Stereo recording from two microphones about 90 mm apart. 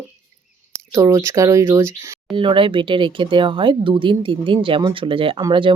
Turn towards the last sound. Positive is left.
turn(degrees=-65)  # may be behind; listen again after turning